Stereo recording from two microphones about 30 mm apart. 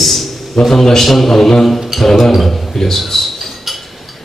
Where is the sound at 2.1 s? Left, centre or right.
Centre.